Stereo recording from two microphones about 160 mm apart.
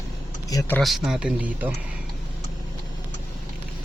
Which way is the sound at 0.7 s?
Centre (ahead or behind).